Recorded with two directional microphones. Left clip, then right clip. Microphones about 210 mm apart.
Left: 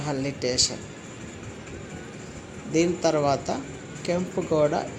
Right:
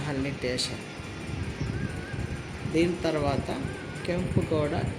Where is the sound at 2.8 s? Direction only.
15° left (ahead or behind).